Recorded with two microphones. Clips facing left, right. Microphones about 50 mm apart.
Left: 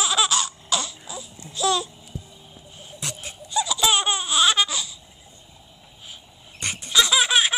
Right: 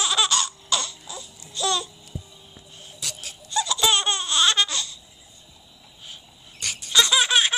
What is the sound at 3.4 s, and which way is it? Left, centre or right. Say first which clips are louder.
Laughter: left 1 dB; centre.